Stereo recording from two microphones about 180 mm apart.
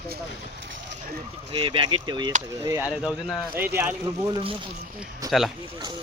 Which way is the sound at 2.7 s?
10° right (ahead or behind).